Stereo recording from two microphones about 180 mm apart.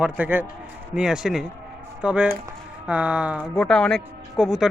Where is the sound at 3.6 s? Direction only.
5° left (ahead or behind).